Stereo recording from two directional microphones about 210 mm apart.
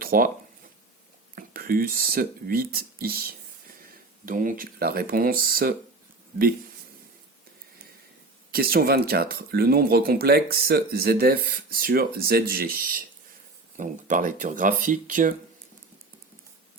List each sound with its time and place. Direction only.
0.0 s a sound: 45° right (ahead or behind)
1.4 s speech: 45° right (ahead or behind)
8.5 s speech: 45° right (ahead or behind)